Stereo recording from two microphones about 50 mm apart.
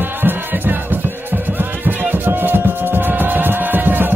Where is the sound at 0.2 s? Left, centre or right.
Right.